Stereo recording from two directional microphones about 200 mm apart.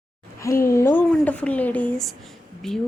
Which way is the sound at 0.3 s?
15° left (ahead or behind).